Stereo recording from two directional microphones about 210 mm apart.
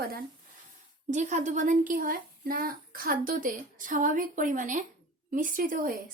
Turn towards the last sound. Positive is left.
turn(degrees=-40)  # may be behind; listen again after turning